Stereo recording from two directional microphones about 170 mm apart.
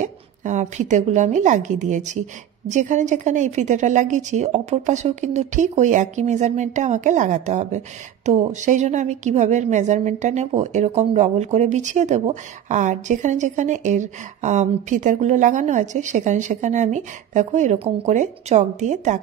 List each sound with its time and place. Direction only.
0.0 s a woman's voice: 45° right (ahead or behind)